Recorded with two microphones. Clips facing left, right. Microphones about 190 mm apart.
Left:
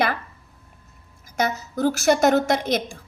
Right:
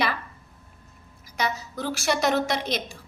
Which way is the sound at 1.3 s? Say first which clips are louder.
Left 5 dB; 45° left (ahead or behind).